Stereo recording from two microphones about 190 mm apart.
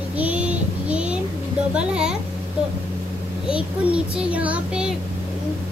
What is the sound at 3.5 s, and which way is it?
A child's voice, 5° right (ahead or behind).